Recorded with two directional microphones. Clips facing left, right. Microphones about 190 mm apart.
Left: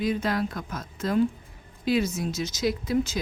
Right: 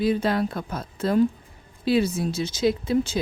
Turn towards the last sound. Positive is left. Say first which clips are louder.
# right 3 dB
turn(degrees=-30)  # may be behind; listen again after turning